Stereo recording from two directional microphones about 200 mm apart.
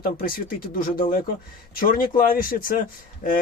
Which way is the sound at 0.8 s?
45° left (ahead or behind).